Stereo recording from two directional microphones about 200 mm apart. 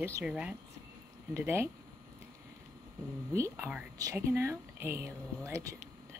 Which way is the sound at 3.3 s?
15° right (ahead or behind).